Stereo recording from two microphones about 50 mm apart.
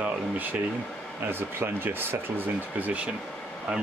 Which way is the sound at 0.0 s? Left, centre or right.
Right.